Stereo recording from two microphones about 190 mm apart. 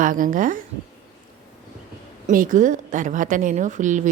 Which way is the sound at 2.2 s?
45° right (ahead or behind).